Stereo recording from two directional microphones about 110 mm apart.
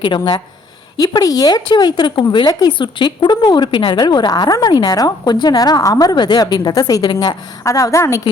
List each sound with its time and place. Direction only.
0.0 s a woman's voice: 45° left (ahead or behind); by 8.2 s 30° left (ahead or behind)